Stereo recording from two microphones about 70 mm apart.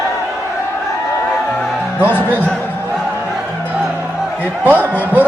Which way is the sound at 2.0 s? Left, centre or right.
Left.